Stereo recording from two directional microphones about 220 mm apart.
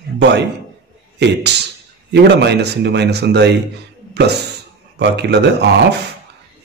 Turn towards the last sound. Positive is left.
turn(degrees=-50)  # may be behind; listen again after turning